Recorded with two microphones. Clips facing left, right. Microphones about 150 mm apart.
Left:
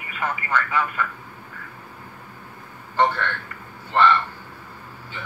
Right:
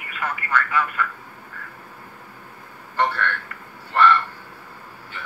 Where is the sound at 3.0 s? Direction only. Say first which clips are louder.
Left 1 dB; 20° left (ahead or behind).